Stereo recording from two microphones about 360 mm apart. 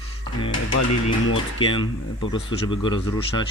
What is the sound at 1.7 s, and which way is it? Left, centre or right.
Speech, centre.